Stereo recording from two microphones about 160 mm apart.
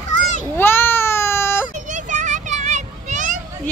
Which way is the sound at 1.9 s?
50° right (ahead or behind).